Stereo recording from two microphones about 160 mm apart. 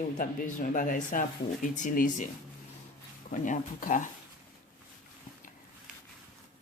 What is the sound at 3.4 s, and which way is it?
Speech, 55° left (ahead or behind).